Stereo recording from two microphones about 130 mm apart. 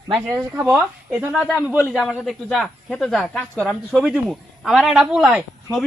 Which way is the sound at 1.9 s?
Centre (ahead or behind).